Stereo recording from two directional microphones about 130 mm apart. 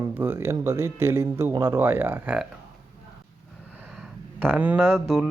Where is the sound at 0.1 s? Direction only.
15° right (ahead or behind).